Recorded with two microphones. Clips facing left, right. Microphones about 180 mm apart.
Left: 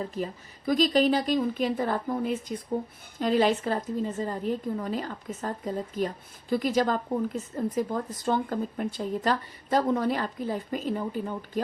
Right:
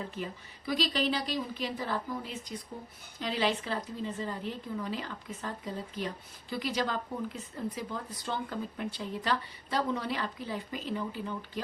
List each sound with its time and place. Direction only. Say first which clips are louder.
0.1 s a woman's voice: left 6 dB; 45° left (ahead or behind)